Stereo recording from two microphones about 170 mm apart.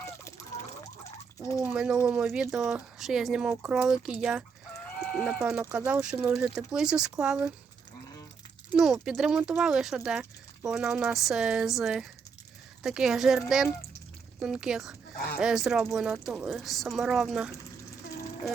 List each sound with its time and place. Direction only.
1.4 s speech: 20° left (ahead or behind)
1.6 s speech: 5° right (ahead or behind)
8.7 s speech: 5° right (ahead or behind)